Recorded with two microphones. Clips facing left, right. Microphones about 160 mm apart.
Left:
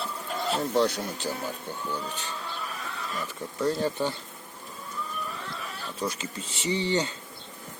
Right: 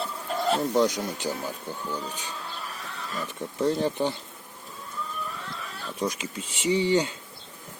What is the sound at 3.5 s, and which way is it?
Speech, 20° right (ahead or behind).